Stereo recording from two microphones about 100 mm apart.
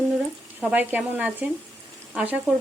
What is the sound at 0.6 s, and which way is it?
Speech, 15° right (ahead or behind).